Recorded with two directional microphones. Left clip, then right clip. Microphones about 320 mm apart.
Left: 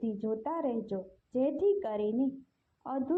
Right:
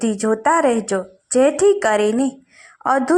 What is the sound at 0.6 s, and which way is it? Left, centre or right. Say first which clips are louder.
A woman's voice: right 17 dB; right.